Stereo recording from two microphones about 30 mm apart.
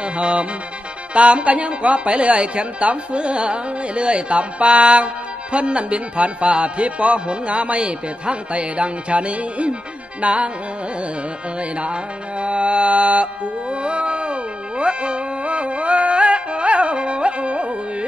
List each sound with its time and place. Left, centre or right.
0.0 s music: right
1.1 s a woman's voice: right
11.7 s music: right